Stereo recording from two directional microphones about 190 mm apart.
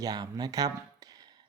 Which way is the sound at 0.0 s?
20° right (ahead or behind).